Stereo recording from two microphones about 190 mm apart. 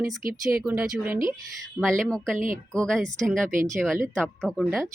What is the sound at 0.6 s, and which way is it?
Speech, 10° right (ahead or behind).